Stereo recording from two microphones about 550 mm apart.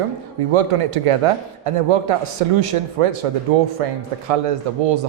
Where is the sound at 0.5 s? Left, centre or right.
Right.